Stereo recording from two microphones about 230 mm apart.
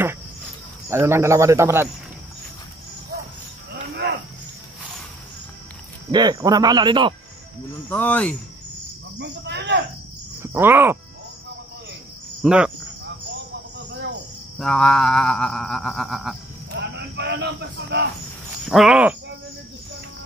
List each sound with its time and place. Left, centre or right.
0.8 s speech: centre
6.1 s speech: centre
7.9 s speech: centre
9.2 s speech: right
10.4 s speech: centre
12.4 s cricket: centre
14.6 s music: centre
16.7 s a man's voice: right
18.7 s music: centre